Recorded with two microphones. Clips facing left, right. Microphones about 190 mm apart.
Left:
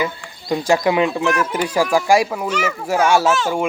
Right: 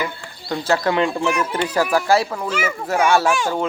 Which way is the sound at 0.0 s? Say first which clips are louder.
Left 3 dB; 15° left (ahead or behind).